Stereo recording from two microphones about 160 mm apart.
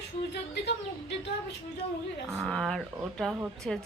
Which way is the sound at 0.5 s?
90° left.